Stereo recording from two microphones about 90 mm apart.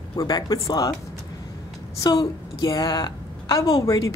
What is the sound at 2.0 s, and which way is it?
A woman's voice, 50° left (ahead or behind).